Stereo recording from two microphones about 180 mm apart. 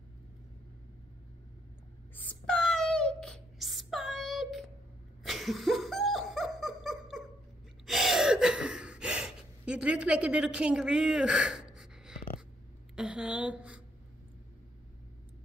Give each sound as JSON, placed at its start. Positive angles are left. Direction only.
{"t": 2.1, "sound": "a sound", "side_deg": 5}
{"t": 5.2, "sound": "laughter", "side_deg": 0}
{"t": 7.8, "sound": "gasp", "side_deg": 0}
{"t": 12.9, "sound": "a woman's voice", "side_deg": -5}